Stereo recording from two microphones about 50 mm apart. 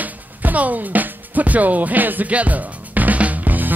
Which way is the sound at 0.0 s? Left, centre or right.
Right.